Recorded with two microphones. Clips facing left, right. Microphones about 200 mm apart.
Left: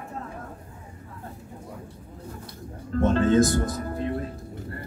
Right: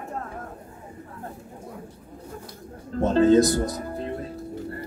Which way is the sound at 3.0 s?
35° right (ahead or behind).